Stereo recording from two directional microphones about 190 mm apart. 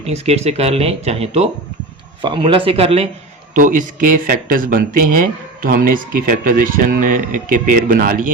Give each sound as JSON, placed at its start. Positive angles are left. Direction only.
{"t": 0.0, "sound": "speech", "side_deg": -35}
{"t": 3.5, "sound": "speech", "side_deg": -45}